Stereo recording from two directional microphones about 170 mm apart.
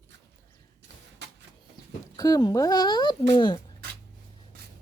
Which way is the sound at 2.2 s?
20° left (ahead or behind).